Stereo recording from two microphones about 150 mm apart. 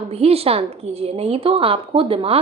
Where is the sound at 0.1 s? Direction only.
40° right (ahead or behind).